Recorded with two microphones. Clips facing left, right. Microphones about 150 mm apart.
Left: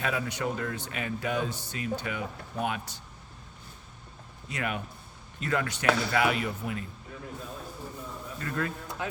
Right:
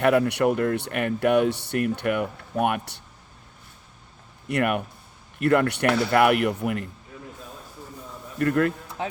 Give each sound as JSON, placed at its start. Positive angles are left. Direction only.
{"t": 0.0, "sound": "speech", "side_deg": -60}
{"t": 4.4, "sound": "speech", "side_deg": -65}
{"t": 8.4, "sound": "speech", "side_deg": -65}